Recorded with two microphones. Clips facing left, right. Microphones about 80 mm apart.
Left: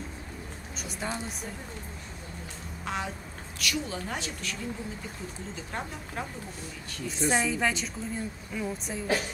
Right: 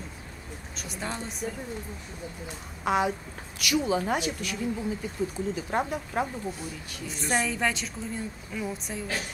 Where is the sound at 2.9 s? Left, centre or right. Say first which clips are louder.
Right 9 dB; centre.